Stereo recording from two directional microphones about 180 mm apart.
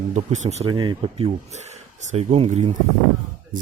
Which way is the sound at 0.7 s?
25° right (ahead or behind).